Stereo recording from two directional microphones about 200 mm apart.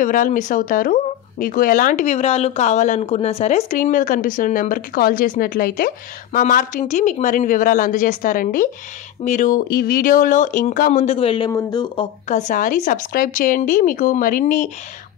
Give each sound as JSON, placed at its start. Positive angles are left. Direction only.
{"t": 0.0, "sound": "speech", "side_deg": 40}